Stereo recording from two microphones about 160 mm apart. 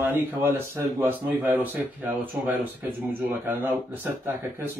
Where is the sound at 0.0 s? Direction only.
15° right (ahead or behind).